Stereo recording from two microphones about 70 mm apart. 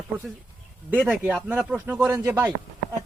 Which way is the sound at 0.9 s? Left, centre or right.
Centre.